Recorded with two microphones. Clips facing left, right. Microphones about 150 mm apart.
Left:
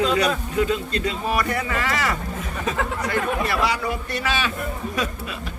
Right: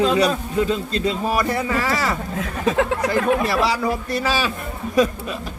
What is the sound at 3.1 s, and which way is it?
A man's voice, 35° right (ahead or behind).